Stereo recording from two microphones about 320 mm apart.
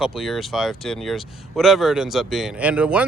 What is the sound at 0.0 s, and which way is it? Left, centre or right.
Speech, centre.